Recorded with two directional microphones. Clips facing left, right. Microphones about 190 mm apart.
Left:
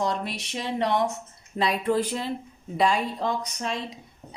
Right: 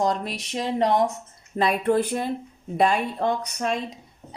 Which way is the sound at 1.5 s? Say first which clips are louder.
Right 3 dB; 55° right (ahead or behind).